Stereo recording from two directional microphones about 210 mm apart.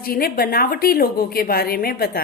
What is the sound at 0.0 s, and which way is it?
A woman's voice, 45° left (ahead or behind).